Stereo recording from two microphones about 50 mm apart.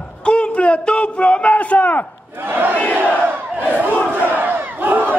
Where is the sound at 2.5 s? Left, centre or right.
Right.